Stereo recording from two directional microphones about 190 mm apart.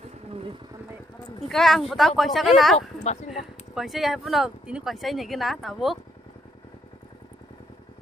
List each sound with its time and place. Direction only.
0.3 s vehicle: 30° right (ahead or behind)
1.5 s speech: centre (ahead or behind)